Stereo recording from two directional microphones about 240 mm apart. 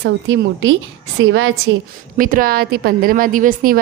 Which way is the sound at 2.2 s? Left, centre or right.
Right.